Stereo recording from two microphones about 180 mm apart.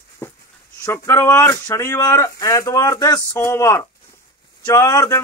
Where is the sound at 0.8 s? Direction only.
15° left (ahead or behind).